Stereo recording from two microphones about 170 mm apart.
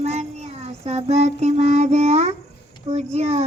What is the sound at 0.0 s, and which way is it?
Child singing, 40° right (ahead or behind).